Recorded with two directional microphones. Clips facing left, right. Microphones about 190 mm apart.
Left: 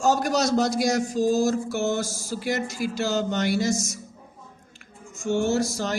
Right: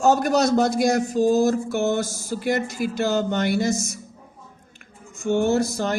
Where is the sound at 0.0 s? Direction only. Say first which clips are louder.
Right 4 dB; 55° right (ahead or behind).